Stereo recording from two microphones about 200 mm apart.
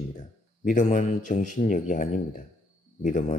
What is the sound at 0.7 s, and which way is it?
A man's voice, 40° left (ahead or behind).